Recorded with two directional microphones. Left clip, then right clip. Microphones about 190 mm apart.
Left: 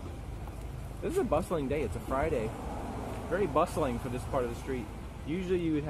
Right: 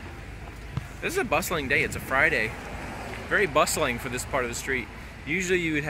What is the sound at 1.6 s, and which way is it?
Speech, 5° right (ahead or behind).